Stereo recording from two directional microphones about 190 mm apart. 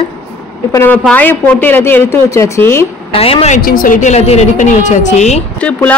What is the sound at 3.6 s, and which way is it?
A woman's voice, 50° left (ahead or behind).